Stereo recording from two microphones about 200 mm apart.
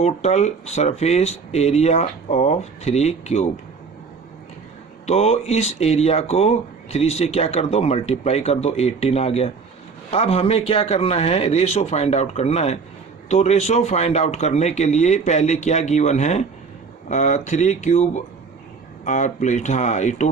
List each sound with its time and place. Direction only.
0.0 s speech: 35° left (ahead or behind)
5.0 s speech: 30° left (ahead or behind)